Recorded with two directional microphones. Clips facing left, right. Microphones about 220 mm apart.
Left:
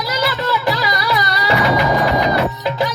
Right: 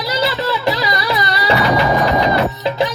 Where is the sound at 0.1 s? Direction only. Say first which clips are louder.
Right 1 dB; 25° right (ahead or behind).